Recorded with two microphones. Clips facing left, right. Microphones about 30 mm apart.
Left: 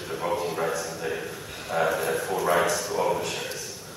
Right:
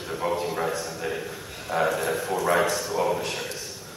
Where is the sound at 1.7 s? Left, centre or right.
Centre.